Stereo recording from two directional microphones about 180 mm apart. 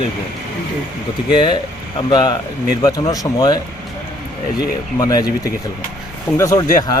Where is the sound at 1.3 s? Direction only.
25° left (ahead or behind).